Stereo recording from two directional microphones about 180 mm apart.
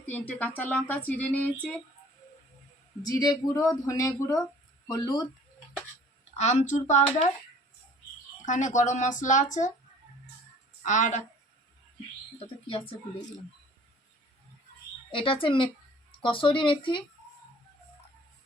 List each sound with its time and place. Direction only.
0.1 s speech: 10° left (ahead or behind)
3.0 s speech: 20° left (ahead or behind)
6.3 s speech: 40° left (ahead or behind)
8.4 s speech: 45° left (ahead or behind)
10.8 s speech: 45° left (ahead or behind)
15.1 s speech: 30° left (ahead or behind)